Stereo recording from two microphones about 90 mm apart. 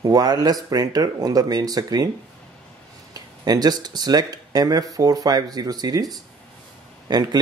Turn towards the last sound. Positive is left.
turn(degrees=-50)  # may be behind; listen again after turning